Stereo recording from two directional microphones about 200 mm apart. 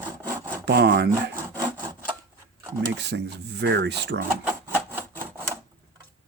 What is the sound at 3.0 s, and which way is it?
Speech, 60° right (ahead or behind).